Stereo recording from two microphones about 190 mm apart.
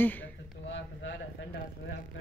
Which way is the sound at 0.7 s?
70° left (ahead or behind).